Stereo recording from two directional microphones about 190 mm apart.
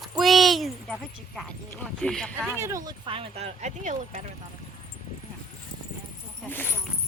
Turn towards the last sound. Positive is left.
turn(degrees=10)  # may be behind; listen again after turning